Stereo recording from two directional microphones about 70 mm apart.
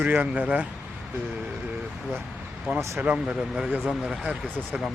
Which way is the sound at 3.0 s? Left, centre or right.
Right.